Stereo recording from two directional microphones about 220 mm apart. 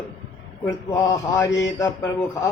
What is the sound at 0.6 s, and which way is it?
A man's voice, 15° left (ahead or behind).